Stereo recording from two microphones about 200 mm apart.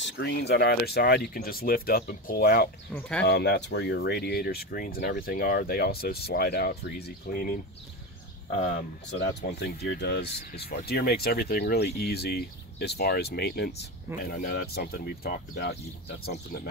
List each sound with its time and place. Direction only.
0.0 s speech: 55° left (ahead or behind)
2.9 s speech: 5° left (ahead or behind)
3.3 s speech: 55° left (ahead or behind)
9.1 s speech: 60° left (ahead or behind)